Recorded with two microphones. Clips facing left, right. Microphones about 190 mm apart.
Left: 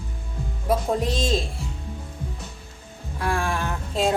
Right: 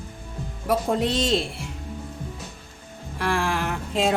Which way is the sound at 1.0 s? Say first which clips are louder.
Right 2 dB; 70° right (ahead or behind).